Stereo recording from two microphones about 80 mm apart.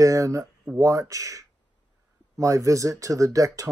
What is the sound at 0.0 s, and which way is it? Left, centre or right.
Speech, right.